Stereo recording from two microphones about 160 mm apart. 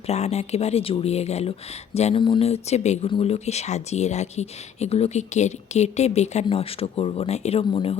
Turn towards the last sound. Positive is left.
turn(degrees=35)  # may be behind; listen again after turning